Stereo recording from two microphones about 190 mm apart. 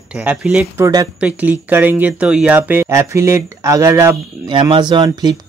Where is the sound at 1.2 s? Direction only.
10° right (ahead or behind).